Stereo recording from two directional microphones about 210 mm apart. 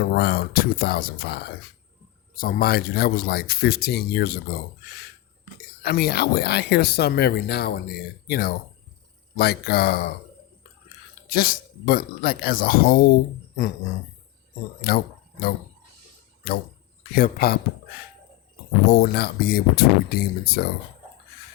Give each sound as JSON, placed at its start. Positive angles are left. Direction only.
{"t": 0.0, "sound": "speech", "side_deg": 45}
{"t": 5.8, "sound": "speech", "side_deg": 50}
{"t": 11.3, "sound": "speech", "side_deg": 45}
{"t": 14.8, "sound": "speech", "side_deg": 45}
{"t": 18.9, "sound": "speech", "side_deg": 50}